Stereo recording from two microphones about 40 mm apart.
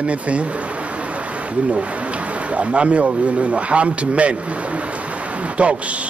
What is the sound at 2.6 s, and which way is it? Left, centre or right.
Speech, right.